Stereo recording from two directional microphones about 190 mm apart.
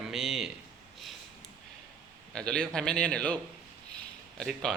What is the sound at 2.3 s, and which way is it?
A man's voice, 5° left (ahead or behind).